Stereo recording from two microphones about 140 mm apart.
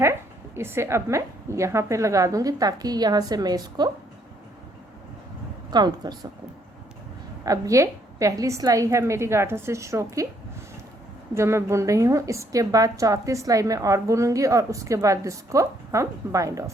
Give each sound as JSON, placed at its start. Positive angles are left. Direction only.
{"t": 0.0, "sound": "a woman's voice", "side_deg": -20}
{"t": 5.7, "sound": "a woman's voice", "side_deg": -30}
{"t": 7.4, "sound": "a woman's voice", "side_deg": -25}
{"t": 11.3, "sound": "a woman's voice", "side_deg": -20}